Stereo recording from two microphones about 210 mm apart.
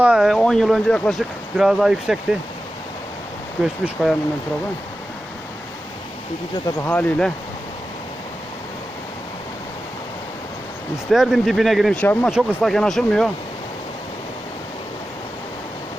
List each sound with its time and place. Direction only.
0.0 s speech: 5° right (ahead or behind)
3.6 s speech: centre (ahead or behind)
6.7 s speech: 15° left (ahead or behind)
6.9 s speech: 5° left (ahead or behind)
11.1 s speech: centre (ahead or behind)